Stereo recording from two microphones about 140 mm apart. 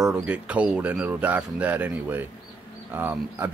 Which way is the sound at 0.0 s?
10° right (ahead or behind).